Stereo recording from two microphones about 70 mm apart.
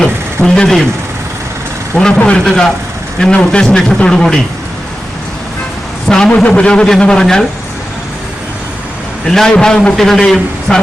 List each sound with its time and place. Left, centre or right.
0.0 s a sound: centre
2.1 s speech: centre
6.1 s speech: centre
9.2 s speech: centre